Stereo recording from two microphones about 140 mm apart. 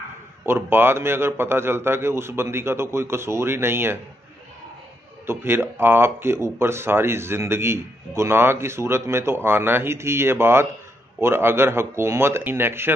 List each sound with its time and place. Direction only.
0.5 s speech: 15° right (ahead or behind)
5.2 s speech: 15° right (ahead or behind)